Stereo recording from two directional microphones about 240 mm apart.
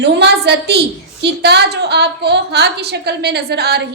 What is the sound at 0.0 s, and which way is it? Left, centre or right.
A woman's voice, right.